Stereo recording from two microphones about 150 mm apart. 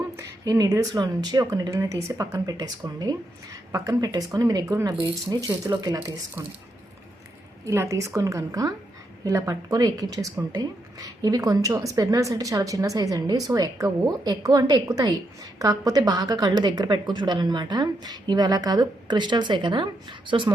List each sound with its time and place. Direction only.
0.2 s a woman's voice: 20° right (ahead or behind)
7.6 s a woman's voice: 20° right (ahead or behind)